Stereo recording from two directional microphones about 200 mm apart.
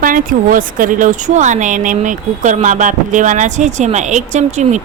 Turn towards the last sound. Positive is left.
turn(degrees=-35)  # may be behind; listen again after turning